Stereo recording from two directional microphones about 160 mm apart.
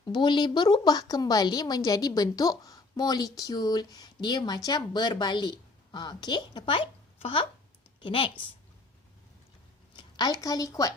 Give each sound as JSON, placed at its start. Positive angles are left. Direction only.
{"t": 0.0, "sound": "a woman's voice", "side_deg": 30}
{"t": 9.9, "sound": "a woman's voice", "side_deg": 25}